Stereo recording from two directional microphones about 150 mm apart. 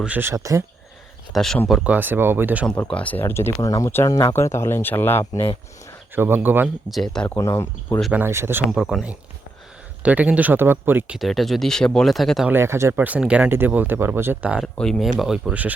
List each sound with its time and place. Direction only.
0.0 s speech: 10° right (ahead or behind)
1.3 s speech: 5° left (ahead or behind)
2.6 s speech: 5° left (ahead or behind)
6.1 s speech: 15° right (ahead or behind)
6.9 s speech: 5° left (ahead or behind)
7.3 s speech: 20° left (ahead or behind)
8.1 s speech: 15° right (ahead or behind)
8.7 s speech: centre (ahead or behind)
11.2 s speech: centre (ahead or behind)
12.5 s speech: 15° right (ahead or behind)
14.8 s speech: centre (ahead or behind)